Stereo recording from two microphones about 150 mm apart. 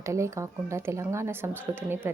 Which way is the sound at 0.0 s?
20° right (ahead or behind).